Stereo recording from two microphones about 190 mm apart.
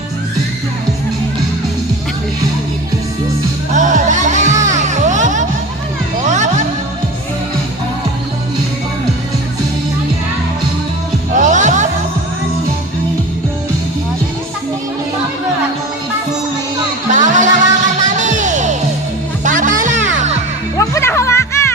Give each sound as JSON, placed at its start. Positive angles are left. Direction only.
{"t": 3.8, "sound": "music", "side_deg": -40}
{"t": 11.3, "sound": "music", "side_deg": -40}
{"t": 17.1, "sound": "music", "side_deg": -40}
{"t": 20.7, "sound": "music", "side_deg": 15}